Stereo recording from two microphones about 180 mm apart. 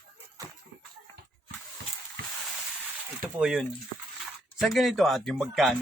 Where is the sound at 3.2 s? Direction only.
Centre (ahead or behind).